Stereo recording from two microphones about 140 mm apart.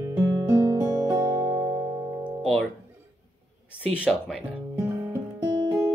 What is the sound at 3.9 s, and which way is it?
Speech, 5° right (ahead or behind).